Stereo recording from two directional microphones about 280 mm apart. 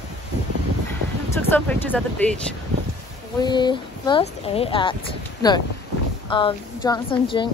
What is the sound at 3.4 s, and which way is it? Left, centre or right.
Speech, centre.